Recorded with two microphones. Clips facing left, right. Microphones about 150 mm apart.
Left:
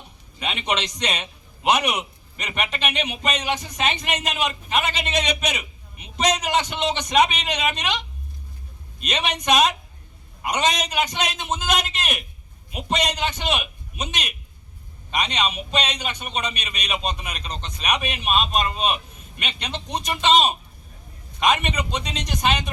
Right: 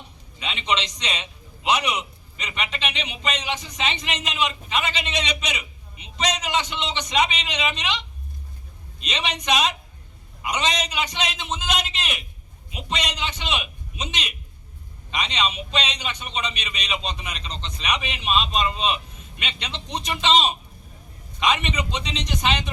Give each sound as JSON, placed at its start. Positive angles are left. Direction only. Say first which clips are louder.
{"t": 0.3, "sound": "a man's voice", "louder": "left 1 dB", "side_deg": 50}